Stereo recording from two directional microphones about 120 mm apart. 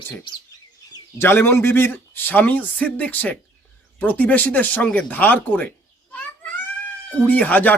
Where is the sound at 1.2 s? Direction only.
20° left (ahead or behind).